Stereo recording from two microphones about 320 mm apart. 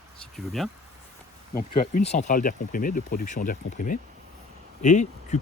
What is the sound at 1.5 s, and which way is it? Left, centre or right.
Speech, left.